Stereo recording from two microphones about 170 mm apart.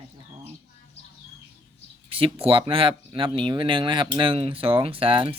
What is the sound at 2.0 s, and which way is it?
Speech, 35° right (ahead or behind).